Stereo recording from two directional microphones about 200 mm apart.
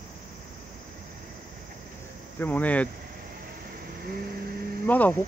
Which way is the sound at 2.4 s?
5° left (ahead or behind).